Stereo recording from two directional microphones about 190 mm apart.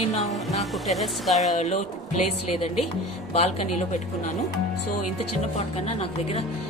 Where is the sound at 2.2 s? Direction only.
35° left (ahead or behind).